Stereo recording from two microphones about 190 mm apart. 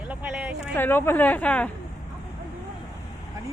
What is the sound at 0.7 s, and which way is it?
Speech, 10° left (ahead or behind).